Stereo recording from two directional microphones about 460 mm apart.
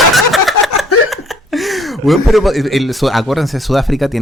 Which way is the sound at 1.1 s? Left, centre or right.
Centre.